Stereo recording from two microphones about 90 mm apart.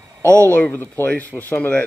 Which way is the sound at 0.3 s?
15° left (ahead or behind).